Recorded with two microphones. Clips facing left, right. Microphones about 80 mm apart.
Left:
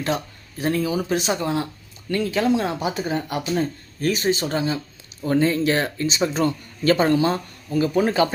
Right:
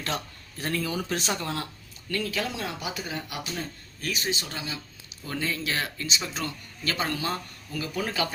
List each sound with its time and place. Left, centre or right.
0.6 s speech: centre; by 8.3 s left